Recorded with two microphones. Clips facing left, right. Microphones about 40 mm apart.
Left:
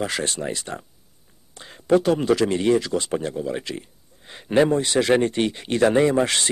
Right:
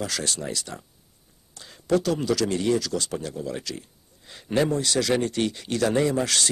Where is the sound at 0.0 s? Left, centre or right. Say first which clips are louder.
Left 4 dB; left.